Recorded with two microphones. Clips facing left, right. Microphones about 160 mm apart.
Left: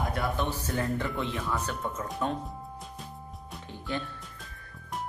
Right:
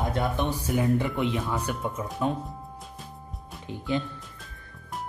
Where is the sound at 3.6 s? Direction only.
15° right (ahead or behind).